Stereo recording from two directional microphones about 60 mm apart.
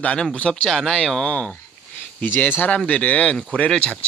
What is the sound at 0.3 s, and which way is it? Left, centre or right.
Speech, centre.